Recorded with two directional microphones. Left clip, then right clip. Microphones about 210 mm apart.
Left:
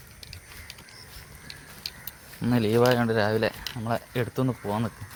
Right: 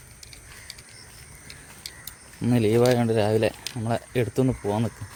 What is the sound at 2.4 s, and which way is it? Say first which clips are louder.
Speech: right 2 dB; 20° right (ahead or behind).